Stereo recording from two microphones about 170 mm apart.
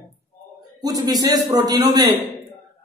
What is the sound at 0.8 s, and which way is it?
A man's voice, 20° right (ahead or behind).